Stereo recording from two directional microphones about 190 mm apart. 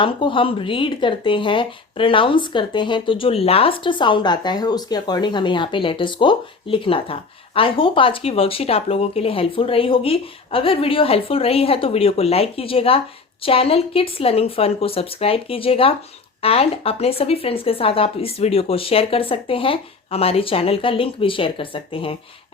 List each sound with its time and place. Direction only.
0.0 s speech: 25° left (ahead or behind)